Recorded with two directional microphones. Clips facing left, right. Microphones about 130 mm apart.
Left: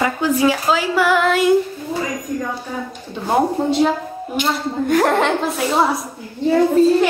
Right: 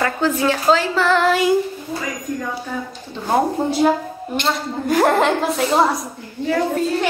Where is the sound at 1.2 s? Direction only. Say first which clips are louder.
Even; centre (ahead or behind).